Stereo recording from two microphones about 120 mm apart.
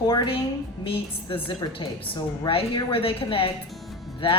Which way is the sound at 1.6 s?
35° left (ahead or behind).